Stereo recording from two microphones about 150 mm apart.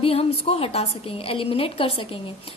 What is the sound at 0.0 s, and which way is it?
A woman's voice, 40° left (ahead or behind).